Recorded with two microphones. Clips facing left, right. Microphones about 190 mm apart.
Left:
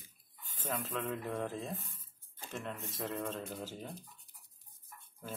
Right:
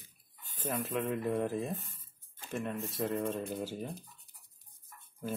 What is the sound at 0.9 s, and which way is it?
Speech, 10° right (ahead or behind).